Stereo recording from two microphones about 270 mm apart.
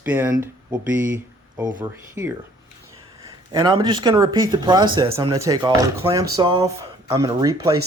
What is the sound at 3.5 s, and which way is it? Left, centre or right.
Speech, centre.